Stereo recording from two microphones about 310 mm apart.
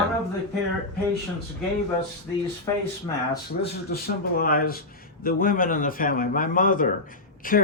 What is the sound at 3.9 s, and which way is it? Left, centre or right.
Speech, left.